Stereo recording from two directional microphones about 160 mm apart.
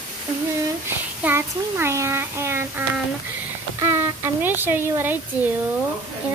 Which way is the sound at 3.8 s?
15° right (ahead or behind).